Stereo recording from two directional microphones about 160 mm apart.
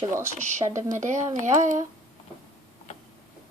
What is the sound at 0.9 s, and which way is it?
Speech, 50° right (ahead or behind).